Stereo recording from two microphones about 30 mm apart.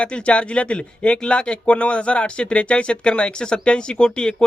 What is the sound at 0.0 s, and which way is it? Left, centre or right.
Speech, left.